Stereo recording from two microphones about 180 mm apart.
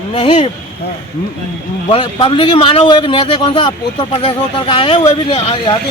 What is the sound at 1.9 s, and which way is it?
A man's voice, 30° left (ahead or behind).